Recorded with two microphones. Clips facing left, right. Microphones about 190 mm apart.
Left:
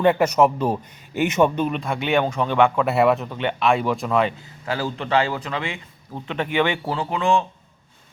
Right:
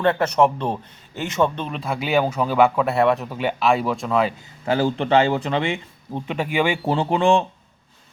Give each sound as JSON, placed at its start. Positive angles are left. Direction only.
{"t": 0.0, "sound": "speech", "side_deg": 10}
{"t": 4.6, "sound": "speech", "side_deg": -25}
{"t": 6.3, "sound": "speech", "side_deg": -10}
{"t": 6.8, "sound": "speech", "side_deg": -25}